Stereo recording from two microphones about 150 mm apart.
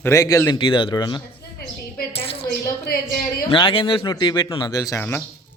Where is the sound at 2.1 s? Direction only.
40° left (ahead or behind).